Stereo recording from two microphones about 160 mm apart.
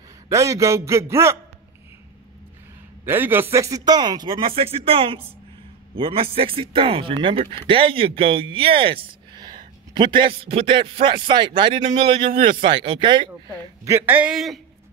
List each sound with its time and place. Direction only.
0.3 s a man's voice: 20° right (ahead or behind)
3.1 s speech: 15° right (ahead or behind); by 13.3 s 30° right (ahead or behind)
13.8 s a man's voice: 15° right (ahead or behind)